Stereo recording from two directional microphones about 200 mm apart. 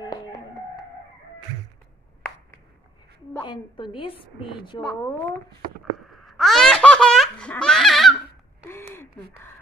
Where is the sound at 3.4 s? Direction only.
25° left (ahead or behind).